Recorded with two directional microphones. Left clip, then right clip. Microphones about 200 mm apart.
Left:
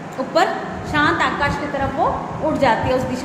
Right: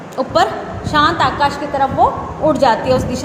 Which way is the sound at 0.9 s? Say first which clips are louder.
Right 4 dB; 25° right (ahead or behind).